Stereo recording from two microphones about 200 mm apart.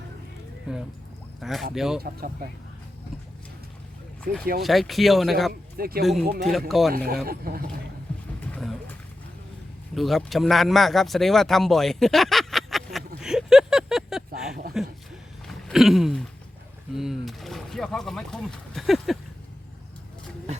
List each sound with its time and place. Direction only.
0.7 s speech: 5° right (ahead or behind)
2.0 s speech: 50° right (ahead or behind)
4.2 s speech: 5° left (ahead or behind)
5.7 s speech: 50° right (ahead or behind)
6.0 s speech: centre (ahead or behind)
6.2 s speech: 50° right (ahead or behind)
6.7 s speech: centre (ahead or behind)
7.3 s speech: 50° right (ahead or behind)
8.5 s wild animals: 5° left (ahead or behind)
9.9 s speech: centre (ahead or behind)
13.2 s a sound: 5° right (ahead or behind)